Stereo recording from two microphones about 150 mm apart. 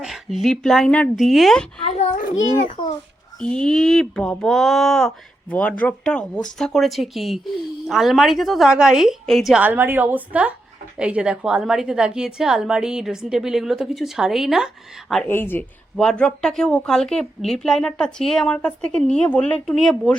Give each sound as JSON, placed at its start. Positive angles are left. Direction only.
{"t": 0.0, "sound": "speech", "side_deg": 0}
{"t": 1.8, "sound": "a child's voice", "side_deg": 45}
{"t": 2.6, "sound": "a child's voice", "side_deg": 35}
{"t": 3.4, "sound": "speech", "side_deg": 5}
{"t": 15.3, "sound": "speech", "side_deg": 15}